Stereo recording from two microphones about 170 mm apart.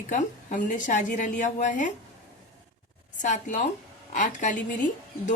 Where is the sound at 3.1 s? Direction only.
45° left (ahead or behind).